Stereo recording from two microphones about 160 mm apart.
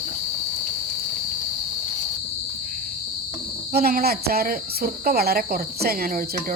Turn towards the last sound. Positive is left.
turn(degrees=-65)  # may be behind; listen again after turning